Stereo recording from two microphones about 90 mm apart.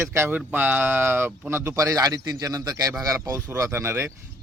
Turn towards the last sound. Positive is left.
turn(degrees=-30)  # may be behind; listen again after turning